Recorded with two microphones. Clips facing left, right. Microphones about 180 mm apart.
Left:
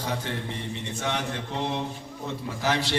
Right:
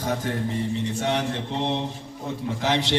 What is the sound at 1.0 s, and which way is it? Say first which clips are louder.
Mantra: right 2 dB; 30° right (ahead or behind).